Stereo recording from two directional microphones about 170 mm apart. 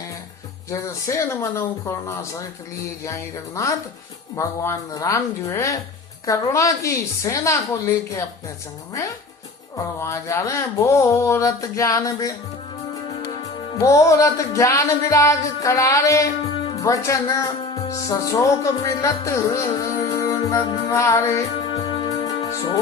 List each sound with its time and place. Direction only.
0.7 s speech: 15° left (ahead or behind)
6.2 s music: 20° left (ahead or behind)
9.7 s speech: 15° left (ahead or behind)
13.7 s music: 20° left (ahead or behind)
16.7 s speech: 20° left (ahead or behind)
17.7 s music: 20° left (ahead or behind)